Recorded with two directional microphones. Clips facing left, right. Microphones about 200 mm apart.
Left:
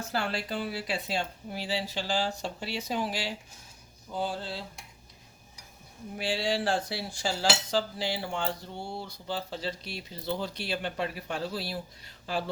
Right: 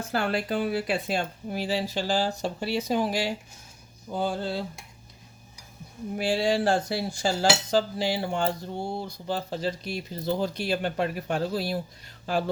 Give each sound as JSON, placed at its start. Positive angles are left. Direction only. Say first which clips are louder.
{"t": 0.1, "sound": "cutlery", "louder": "right 6 dB", "side_deg": -55}
{"t": 6.1, "sound": "cutlery", "louder": "right 5 dB", "side_deg": -50}